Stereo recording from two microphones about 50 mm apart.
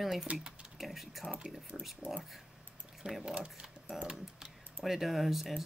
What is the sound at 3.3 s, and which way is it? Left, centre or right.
Speech, right.